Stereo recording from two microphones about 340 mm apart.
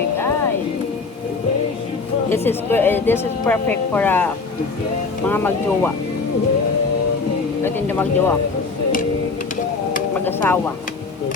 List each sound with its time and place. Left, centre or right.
2.3 s a woman's voice: centre
5.3 s a woman's voice: centre
7.6 s speech: centre
10.2 s a woman's voice: centre